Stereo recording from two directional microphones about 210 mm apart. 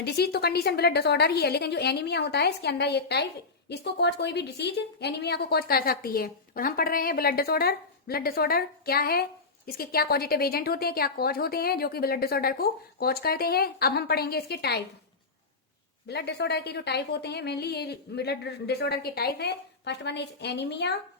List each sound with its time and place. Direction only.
0.0 s a woman's voice: 50° left (ahead or behind)
16.0 s a woman's voice: 50° left (ahead or behind)